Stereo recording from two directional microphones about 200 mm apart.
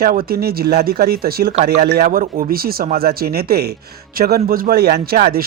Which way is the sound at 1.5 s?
35° right (ahead or behind).